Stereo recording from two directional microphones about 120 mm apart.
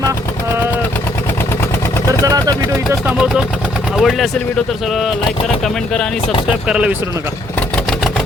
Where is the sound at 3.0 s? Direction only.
5° right (ahead or behind).